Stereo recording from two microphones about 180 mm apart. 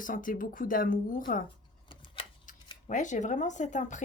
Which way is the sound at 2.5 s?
50° left (ahead or behind).